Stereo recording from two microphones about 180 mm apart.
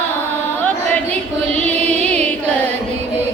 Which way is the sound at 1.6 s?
5° left (ahead or behind).